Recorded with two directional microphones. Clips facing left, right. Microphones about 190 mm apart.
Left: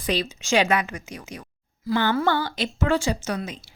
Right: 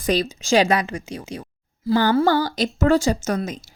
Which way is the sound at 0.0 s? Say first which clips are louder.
Right 5 dB; 40° right (ahead or behind).